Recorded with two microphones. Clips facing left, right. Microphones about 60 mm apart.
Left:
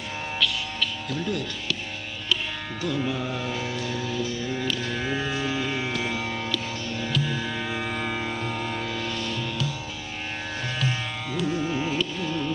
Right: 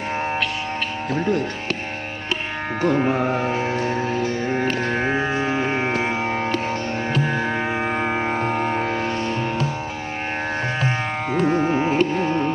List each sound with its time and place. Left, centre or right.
1.1 s speech: right
2.8 s music: right
10.8 s music: right